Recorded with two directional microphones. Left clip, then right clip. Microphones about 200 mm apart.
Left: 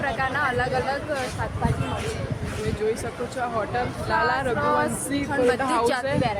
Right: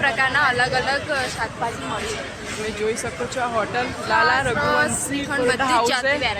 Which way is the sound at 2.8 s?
20° right (ahead or behind).